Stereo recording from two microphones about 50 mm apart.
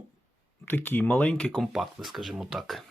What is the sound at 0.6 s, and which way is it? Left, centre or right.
Speech, left.